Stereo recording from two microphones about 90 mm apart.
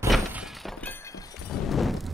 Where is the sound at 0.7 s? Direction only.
20° left (ahead or behind).